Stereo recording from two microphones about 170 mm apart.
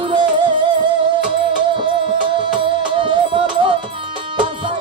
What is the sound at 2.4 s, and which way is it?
Music, 30° right (ahead or behind).